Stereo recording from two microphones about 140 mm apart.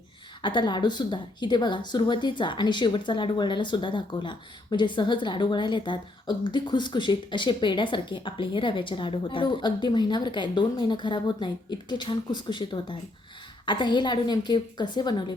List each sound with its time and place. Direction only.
0.4 s speech: 35° left (ahead or behind)